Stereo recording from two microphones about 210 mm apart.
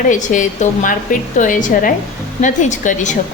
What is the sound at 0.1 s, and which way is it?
A woman's voice, 40° left (ahead or behind).